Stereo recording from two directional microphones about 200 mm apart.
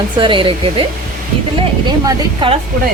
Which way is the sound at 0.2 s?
25° right (ahead or behind).